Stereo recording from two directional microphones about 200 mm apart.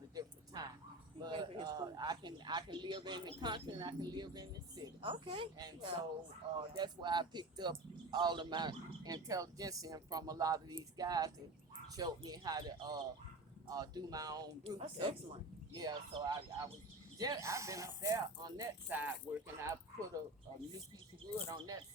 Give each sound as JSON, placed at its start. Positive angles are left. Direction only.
{"t": 0.1, "sound": "a sound", "side_deg": -20}
{"t": 1.2, "sound": "speech", "side_deg": -25}
{"t": 21.3, "sound": "speech", "side_deg": -20}